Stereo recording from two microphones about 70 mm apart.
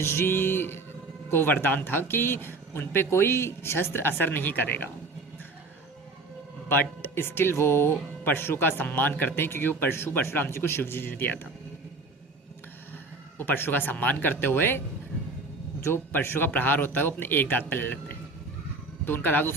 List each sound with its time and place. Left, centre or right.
0.0 s speech: left
6.7 s speech: left
13.4 s speech: left
15.8 s speech: left